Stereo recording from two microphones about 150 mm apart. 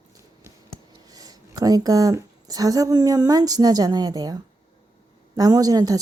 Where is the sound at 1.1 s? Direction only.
25° right (ahead or behind).